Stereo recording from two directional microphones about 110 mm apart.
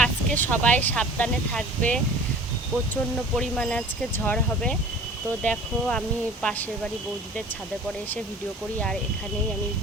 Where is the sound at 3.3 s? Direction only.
5° left (ahead or behind).